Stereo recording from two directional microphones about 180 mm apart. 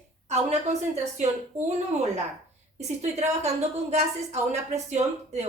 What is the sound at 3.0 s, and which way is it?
A woman's voice, 40° right (ahead or behind).